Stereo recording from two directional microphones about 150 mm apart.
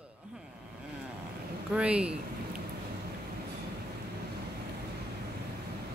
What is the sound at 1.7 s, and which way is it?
Speech, 10° right (ahead or behind).